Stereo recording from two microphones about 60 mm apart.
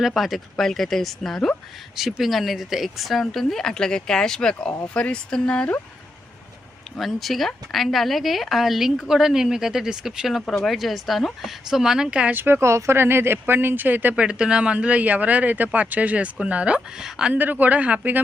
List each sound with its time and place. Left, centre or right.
0.1 s a woman's voice: centre
2.0 s a woman's voice: centre; by 5.8 s left
7.0 s a woman's voice: centre
12.3 s speech: right
14.2 s speech: centre
17.3 s speech: right